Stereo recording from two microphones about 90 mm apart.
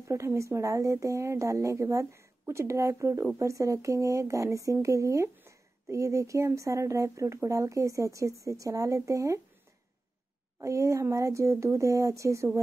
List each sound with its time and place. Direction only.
0.1 s speech: 35° right (ahead or behind)
10.6 s speech: 35° right (ahead or behind)